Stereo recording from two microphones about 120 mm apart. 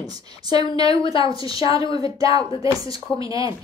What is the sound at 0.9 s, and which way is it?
Speech, 50° left (ahead or behind).